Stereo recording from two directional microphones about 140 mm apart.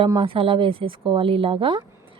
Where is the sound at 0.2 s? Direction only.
40° right (ahead or behind).